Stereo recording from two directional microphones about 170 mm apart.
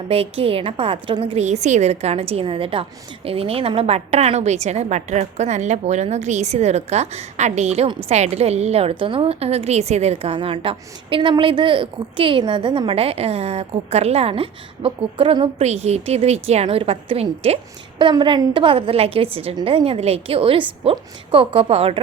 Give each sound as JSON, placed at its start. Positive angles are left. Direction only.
{"t": 0.1, "sound": "a woman's voice", "side_deg": -35}